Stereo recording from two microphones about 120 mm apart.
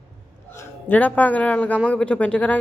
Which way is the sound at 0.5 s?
15° left (ahead or behind).